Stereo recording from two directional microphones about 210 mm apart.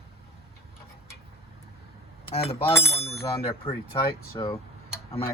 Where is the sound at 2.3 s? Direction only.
25° left (ahead or behind).